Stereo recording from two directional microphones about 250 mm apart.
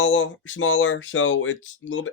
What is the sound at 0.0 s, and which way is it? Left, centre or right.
Speech, left.